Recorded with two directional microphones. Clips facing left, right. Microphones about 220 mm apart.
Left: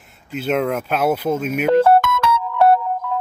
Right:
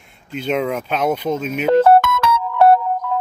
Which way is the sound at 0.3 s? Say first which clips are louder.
Left 1 dB; 5° left (ahead or behind).